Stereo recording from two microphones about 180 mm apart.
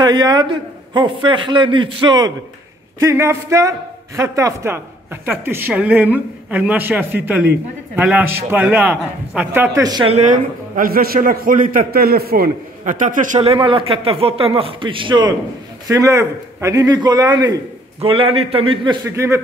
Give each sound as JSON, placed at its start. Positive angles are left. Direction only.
{"t": 0.0, "sound": "a man's voice", "side_deg": -25}
{"t": 10.1, "sound": "a man's voice", "side_deg": -45}
{"t": 13.4, "sound": "a man's voice", "side_deg": -30}
{"t": 18.0, "sound": "speech", "side_deg": -30}
{"t": 19.0, "sound": "a woman's voice", "side_deg": -15}